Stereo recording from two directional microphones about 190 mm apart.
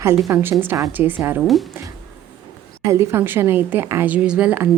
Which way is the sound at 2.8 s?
15° right (ahead or behind).